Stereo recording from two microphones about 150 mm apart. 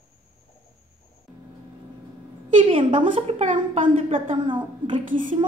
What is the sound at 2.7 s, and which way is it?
A woman's voice, 35° right (ahead or behind).